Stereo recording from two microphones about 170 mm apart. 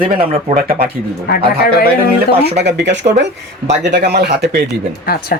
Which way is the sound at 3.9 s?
75° right (ahead or behind).